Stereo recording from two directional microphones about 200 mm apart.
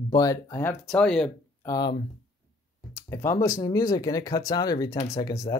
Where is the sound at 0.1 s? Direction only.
15° left (ahead or behind).